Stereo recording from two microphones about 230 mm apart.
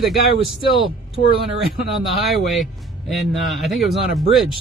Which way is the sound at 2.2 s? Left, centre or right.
Centre.